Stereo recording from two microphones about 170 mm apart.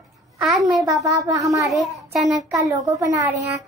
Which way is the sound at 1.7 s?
Centre (ahead or behind).